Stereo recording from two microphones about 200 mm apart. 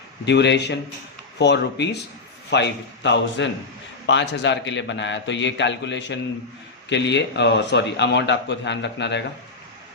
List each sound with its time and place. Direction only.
0.3 s a man's voice: 60° left (ahead or behind)